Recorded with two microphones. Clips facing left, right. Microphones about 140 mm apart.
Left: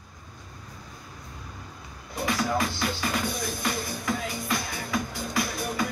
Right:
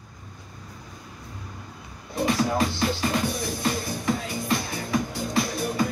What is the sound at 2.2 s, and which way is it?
Music, 30° right (ahead or behind).